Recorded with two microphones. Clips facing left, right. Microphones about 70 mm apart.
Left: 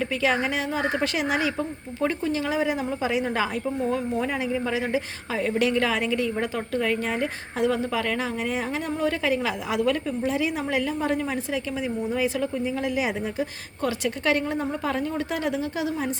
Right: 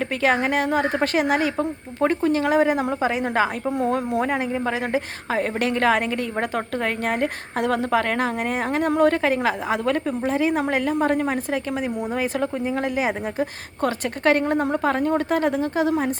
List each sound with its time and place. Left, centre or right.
0.2 s a woman's voice: right
3.7 s speech: right